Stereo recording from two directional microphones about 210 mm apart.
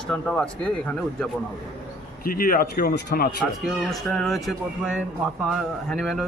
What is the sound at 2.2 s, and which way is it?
Speech, 45° left (ahead or behind).